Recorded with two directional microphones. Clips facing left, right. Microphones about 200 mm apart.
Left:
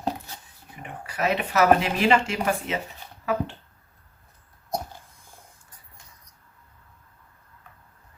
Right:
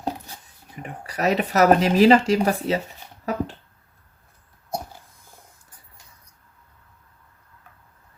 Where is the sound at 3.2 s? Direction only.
40° right (ahead or behind).